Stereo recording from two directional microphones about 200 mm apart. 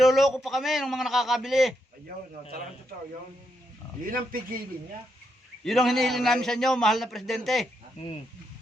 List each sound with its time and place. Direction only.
0.0 s a man's voice: centre (ahead or behind)
4.0 s speech: 45° right (ahead or behind)
5.6 s a man's voice: centre (ahead or behind)